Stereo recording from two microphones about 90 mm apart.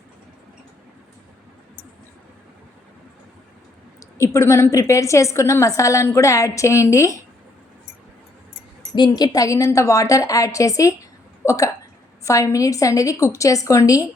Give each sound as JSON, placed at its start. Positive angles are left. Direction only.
{"t": 4.2, "sound": "a woman's voice", "side_deg": 30}
{"t": 8.9, "sound": "a woman's voice", "side_deg": 50}